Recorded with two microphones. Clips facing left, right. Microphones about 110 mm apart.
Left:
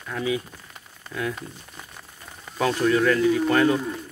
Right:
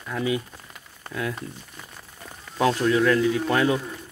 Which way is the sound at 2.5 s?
5° right (ahead or behind).